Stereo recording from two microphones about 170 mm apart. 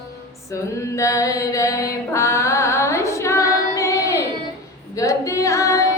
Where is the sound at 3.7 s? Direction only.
20° left (ahead or behind).